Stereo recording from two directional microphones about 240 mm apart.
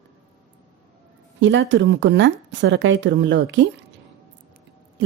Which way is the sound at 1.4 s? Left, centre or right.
Right.